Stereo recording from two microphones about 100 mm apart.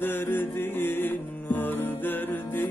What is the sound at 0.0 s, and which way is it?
Music, 20° left (ahead or behind).